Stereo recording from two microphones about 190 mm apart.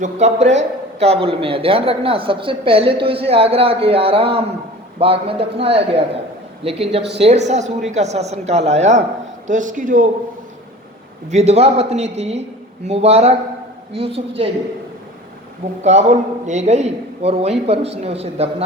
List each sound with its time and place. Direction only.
0.0 s a man's voice: 35° right (ahead or behind)
11.3 s a man's voice: 35° right (ahead or behind)
15.8 s a man's voice: 35° right (ahead or behind)